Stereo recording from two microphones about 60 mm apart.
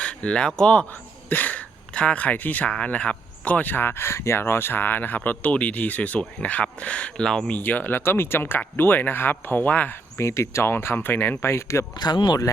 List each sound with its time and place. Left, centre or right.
0.0 s speech: centre
1.3 s speech: left
2.6 s speech: centre
7.3 s speech: centre
7.5 s speech: left
10.2 s speech: left
11.4 s speech: left